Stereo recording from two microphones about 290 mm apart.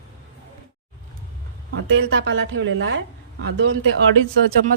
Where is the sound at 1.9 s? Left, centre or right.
Right.